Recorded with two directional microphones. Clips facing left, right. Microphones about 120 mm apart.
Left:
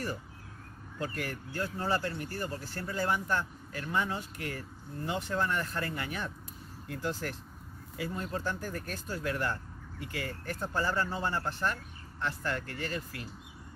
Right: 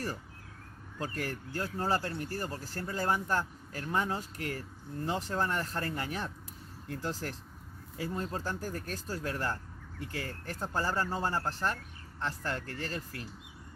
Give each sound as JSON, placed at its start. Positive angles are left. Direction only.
{"t": 0.9, "sound": "speech", "side_deg": -40}